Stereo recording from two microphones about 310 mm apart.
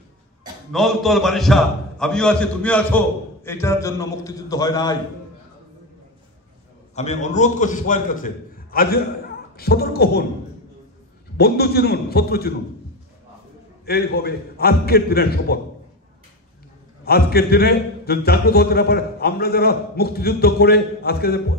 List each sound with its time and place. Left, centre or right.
0.7 s a man's voice: centre
7.0 s a man's voice: left
11.3 s a man's voice: left
13.8 s a man's voice: left
17.0 s a man's voice: left